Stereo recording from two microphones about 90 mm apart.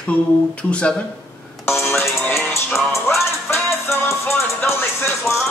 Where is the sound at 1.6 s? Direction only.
30° left (ahead or behind).